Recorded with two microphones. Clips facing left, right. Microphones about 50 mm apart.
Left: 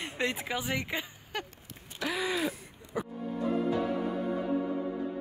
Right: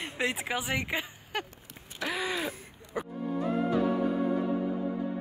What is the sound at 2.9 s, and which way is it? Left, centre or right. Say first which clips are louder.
Music: even; right.